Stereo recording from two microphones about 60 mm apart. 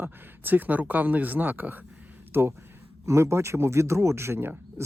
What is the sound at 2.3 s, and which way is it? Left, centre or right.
Speech, right.